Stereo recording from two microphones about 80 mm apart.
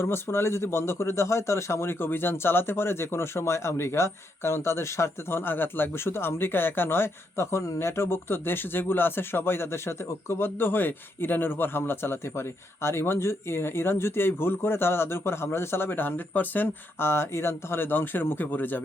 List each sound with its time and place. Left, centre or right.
0.0 s speech: left